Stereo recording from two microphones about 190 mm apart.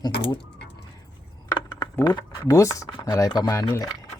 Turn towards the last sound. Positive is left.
turn(degrees=15)  # may be behind; listen again after turning